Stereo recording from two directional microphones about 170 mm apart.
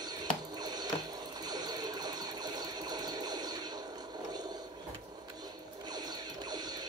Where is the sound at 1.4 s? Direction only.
25° right (ahead or behind).